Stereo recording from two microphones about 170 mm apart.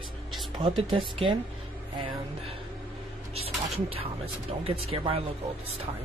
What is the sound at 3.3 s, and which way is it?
Speech, 35° right (ahead or behind).